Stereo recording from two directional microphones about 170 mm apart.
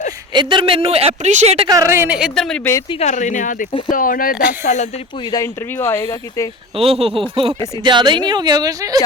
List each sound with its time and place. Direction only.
0.3 s speech: 30° right (ahead or behind)
1.6 s a woman's voice: 20° right (ahead or behind); by 2.6 s centre (ahead or behind)
2.9 s speech: 40° left (ahead or behind); by 4.4 s 55° left (ahead or behind)
4.6 s speech: 45° left (ahead or behind)
5.3 s speech: 15° left (ahead or behind)
6.7 s a woman's voice: 35° right (ahead or behind)